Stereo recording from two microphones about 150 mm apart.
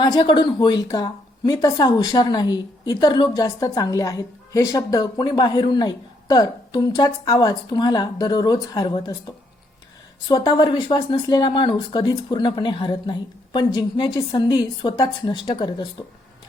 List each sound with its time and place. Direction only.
0.0 s a woman's voice: 30° left (ahead or behind)